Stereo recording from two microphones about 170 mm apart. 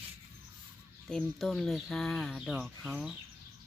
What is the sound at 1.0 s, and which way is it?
Speech, centre (ahead or behind).